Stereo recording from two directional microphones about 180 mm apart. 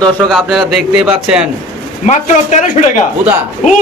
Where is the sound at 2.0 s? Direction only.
40° left (ahead or behind).